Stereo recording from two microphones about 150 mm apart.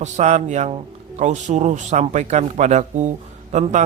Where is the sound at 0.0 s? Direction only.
50° right (ahead or behind).